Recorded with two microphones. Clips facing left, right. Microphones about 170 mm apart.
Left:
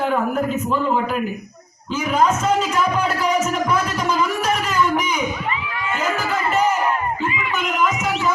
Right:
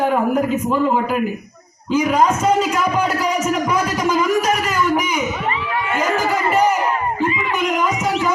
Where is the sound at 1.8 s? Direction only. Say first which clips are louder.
Right 3 dB; 10° right (ahead or behind).